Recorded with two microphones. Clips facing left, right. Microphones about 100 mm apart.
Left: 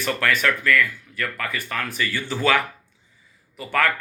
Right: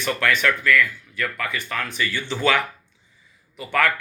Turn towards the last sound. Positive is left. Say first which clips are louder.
# right 1 dB
turn(degrees=40)  # may be behind; listen again after turning